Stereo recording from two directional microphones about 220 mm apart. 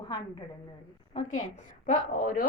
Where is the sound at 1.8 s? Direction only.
40° left (ahead or behind).